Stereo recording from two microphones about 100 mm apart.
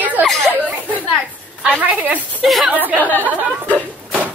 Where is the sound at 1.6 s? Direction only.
10° right (ahead or behind).